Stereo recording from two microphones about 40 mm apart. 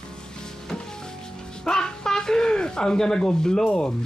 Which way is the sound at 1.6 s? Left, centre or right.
Centre.